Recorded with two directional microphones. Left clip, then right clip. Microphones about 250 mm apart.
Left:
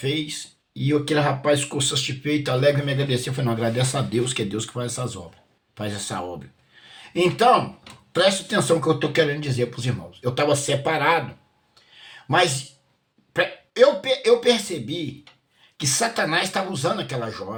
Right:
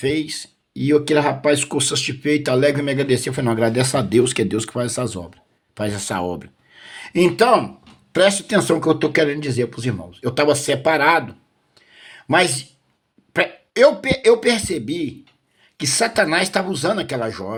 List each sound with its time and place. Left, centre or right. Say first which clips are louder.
0.0 s speech: right 5 dB; right
12.0 s a sound: right 3 dB; right
13.3 s speech: right 4 dB; right